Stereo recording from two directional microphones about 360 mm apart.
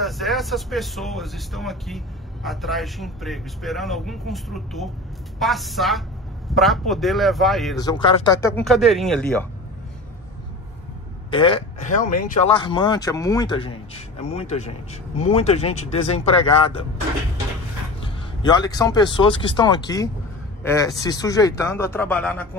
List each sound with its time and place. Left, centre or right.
0.0 s speech: centre
7.8 s speech: centre
11.2 s speech: centre
18.4 s speech: centre